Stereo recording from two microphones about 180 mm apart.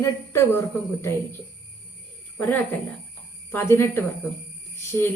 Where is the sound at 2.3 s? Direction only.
10° left (ahead or behind).